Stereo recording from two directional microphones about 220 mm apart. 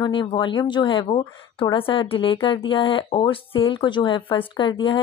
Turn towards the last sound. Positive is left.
turn(degrees=20)  # may be behind; listen again after turning